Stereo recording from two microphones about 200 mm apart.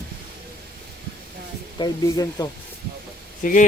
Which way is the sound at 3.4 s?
40° left (ahead or behind).